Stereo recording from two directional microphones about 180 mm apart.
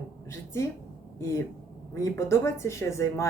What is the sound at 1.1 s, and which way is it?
A woman's voice, 15° left (ahead or behind).